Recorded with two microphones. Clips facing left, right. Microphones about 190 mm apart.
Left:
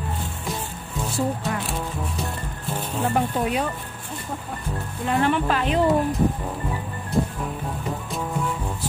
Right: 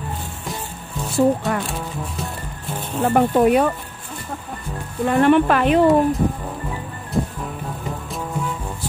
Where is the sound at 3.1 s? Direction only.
60° right (ahead or behind).